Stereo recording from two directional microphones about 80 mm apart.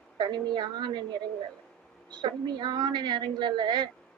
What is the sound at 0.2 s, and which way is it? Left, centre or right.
Speech, right.